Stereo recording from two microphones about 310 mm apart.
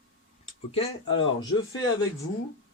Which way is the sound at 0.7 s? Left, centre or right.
Centre.